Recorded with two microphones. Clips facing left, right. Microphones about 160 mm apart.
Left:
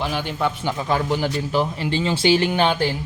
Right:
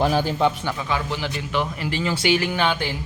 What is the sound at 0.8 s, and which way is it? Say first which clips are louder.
A man's voice: left 5 dB; 45° left (ahead or behind).